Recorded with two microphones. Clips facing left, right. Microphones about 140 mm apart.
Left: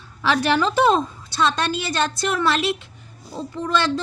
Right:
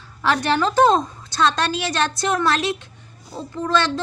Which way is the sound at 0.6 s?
40° right (ahead or behind).